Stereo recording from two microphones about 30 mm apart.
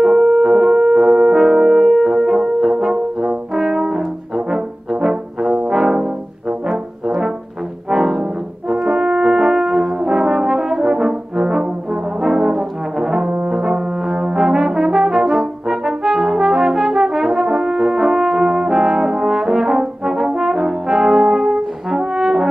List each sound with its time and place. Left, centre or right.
0.0 s music: centre
1.4 s brass instrument: centre
1.9 s music: centre
2.1 s brass instrument: centre
5.7 s brass instrument: centre
21.9 s french horn: right